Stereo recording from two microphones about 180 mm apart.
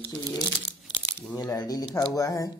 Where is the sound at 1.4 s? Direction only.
20° left (ahead or behind).